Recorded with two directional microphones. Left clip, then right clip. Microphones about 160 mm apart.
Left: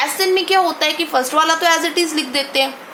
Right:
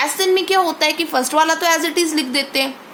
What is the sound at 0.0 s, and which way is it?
A woman's voice, 40° right (ahead or behind).